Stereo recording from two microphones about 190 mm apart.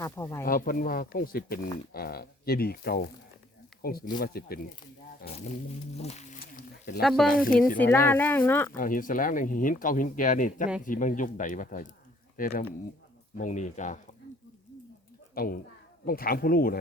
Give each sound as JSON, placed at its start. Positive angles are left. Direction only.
{"t": 0.0, "sound": "speech", "side_deg": 15}
{"t": 0.4, "sound": "speech", "side_deg": 50}
{"t": 5.2, "sound": "a sound", "side_deg": 55}
{"t": 5.9, "sound": "speech", "side_deg": 35}
{"t": 6.4, "sound": "a sound", "side_deg": 45}
{"t": 7.0, "sound": "speech", "side_deg": 0}
{"t": 7.3, "sound": "speech", "side_deg": 50}
{"t": 7.8, "sound": "speech", "side_deg": 10}
{"t": 8.7, "sound": "speech", "side_deg": 45}
{"t": 15.4, "sound": "speech", "side_deg": 50}